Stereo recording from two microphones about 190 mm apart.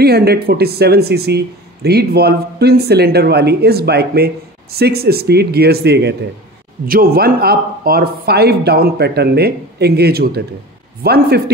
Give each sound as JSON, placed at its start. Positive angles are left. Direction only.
{"t": 0.0, "sound": "speech", "side_deg": -55}